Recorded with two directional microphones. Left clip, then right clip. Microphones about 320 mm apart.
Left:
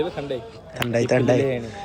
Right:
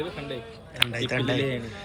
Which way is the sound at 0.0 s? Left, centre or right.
Centre.